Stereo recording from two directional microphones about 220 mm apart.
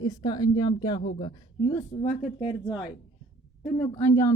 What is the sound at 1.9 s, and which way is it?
Speech, 30° left (ahead or behind).